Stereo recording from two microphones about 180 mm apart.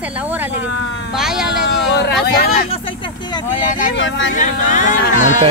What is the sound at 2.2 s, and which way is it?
Speech, 60° left (ahead or behind).